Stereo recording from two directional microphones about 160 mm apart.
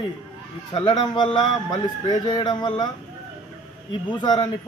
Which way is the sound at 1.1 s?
30° left (ahead or behind).